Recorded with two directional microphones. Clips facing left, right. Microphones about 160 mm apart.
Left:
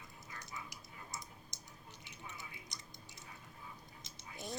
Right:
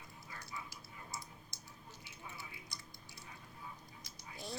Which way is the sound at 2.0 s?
20° left (ahead or behind).